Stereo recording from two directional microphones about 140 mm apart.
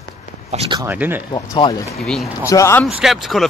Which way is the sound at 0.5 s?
50° right (ahead or behind).